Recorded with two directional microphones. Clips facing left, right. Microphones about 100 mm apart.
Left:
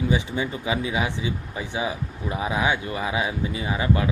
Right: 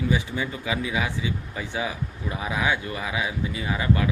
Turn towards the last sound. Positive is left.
turn(degrees=25)  # may be behind; listen again after turning